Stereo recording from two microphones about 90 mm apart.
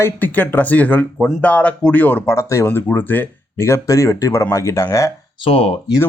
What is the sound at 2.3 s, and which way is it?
Speech, 35° left (ahead or behind).